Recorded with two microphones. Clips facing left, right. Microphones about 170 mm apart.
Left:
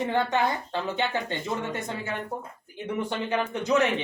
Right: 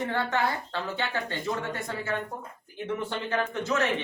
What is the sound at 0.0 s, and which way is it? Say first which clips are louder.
Speech: left 3 dB; 20° left (ahead or behind).